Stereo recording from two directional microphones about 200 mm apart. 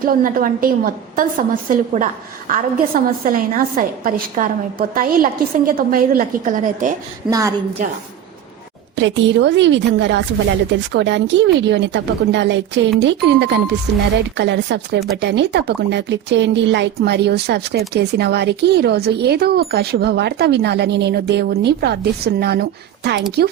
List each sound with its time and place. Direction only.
0.0 s a woman's voice: 45° right (ahead or behind)
7.3 s a woman's voice: 15° right (ahead or behind)
9.0 s speech: 65° right (ahead or behind)